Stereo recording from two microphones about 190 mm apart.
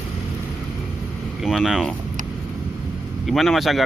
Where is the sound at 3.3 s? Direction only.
Centre (ahead or behind).